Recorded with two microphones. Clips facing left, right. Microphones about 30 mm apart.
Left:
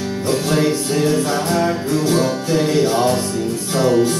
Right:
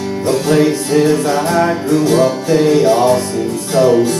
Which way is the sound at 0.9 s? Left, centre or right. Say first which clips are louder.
Right 8 dB; right.